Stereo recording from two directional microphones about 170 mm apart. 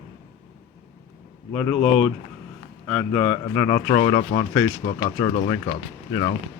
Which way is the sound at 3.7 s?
25° left (ahead or behind).